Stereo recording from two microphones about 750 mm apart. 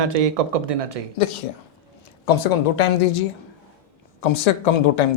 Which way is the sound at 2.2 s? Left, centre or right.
Left.